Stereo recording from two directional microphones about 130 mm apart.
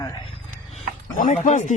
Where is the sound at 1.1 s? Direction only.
75° left (ahead or behind).